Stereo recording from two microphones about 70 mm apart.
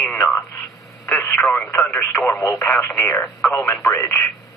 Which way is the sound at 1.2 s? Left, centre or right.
Left.